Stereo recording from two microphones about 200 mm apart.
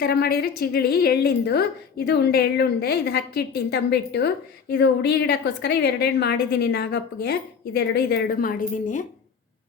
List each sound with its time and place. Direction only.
0.0 s a woman's voice: 50° left (ahead or behind)